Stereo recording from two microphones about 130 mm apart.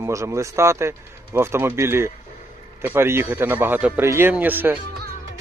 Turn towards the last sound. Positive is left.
turn(degrees=-15)  # may be behind; listen again after turning